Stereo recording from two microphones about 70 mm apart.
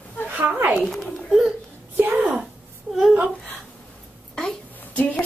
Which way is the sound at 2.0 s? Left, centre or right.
Right.